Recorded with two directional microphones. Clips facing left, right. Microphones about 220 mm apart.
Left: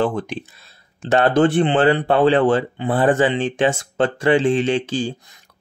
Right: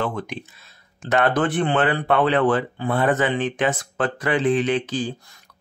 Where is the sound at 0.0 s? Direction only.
30° left (ahead or behind).